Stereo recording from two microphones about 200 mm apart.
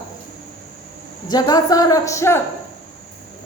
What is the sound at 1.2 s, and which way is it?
A woman's voice, 20° left (ahead or behind).